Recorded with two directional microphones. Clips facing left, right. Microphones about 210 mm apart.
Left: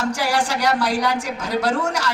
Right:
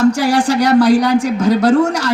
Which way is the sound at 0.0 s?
45° right (ahead or behind).